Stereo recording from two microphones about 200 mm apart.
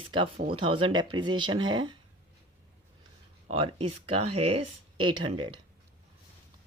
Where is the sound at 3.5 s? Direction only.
25° right (ahead or behind).